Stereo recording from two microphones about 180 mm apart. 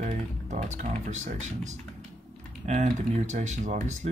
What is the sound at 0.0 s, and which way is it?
Speech, 40° right (ahead or behind).